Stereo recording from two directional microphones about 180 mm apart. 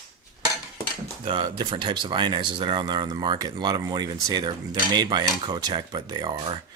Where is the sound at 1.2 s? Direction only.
25° right (ahead or behind).